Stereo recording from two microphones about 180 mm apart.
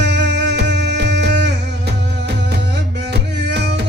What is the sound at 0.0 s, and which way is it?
Music, 75° right (ahead or behind).